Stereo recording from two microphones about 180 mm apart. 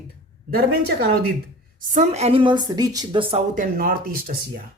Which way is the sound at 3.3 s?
45° right (ahead or behind).